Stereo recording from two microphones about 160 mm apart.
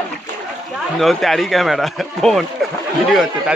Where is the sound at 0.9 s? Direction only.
Centre (ahead or behind).